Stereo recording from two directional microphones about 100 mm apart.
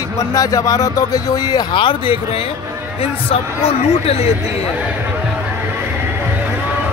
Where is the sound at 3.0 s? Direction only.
80° left.